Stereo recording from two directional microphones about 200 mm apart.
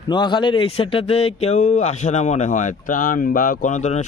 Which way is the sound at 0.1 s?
25° left (ahead or behind).